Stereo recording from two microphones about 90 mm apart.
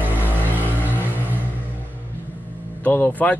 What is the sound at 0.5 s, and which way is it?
Vehicle, 20° left (ahead or behind).